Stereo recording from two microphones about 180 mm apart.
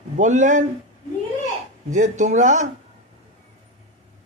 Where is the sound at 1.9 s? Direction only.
40° right (ahead or behind).